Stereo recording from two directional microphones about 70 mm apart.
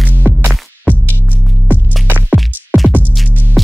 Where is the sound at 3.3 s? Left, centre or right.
Right.